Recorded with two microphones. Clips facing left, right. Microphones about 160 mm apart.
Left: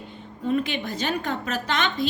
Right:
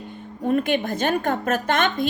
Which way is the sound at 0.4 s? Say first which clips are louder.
Right 4 dB; 50° right (ahead or behind).